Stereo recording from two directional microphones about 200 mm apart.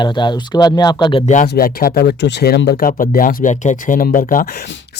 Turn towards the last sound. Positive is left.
turn(degrees=45)  # may be behind; listen again after turning